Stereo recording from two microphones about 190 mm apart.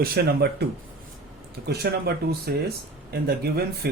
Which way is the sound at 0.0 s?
55° right (ahead or behind).